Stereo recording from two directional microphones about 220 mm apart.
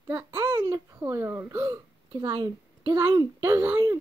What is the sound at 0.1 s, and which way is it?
Hiccup, 20° right (ahead or behind).